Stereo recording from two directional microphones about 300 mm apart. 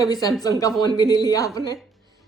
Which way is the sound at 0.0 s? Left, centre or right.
Centre.